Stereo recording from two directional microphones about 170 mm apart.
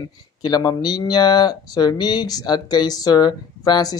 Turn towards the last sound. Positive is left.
turn(degrees=25)  # may be behind; listen again after turning